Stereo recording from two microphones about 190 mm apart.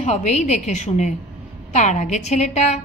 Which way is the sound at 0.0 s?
35° left (ahead or behind).